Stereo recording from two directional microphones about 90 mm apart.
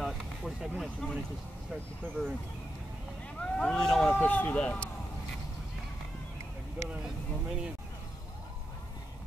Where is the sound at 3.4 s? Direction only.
10° left (ahead or behind).